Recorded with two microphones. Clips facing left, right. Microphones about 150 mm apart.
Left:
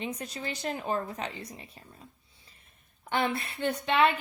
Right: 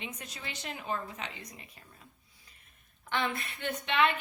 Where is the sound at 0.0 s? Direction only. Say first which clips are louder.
Left 8 dB; 35° left (ahead or behind).